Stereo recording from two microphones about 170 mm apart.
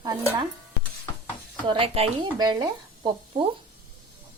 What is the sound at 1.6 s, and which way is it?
Speech, 30° right (ahead or behind).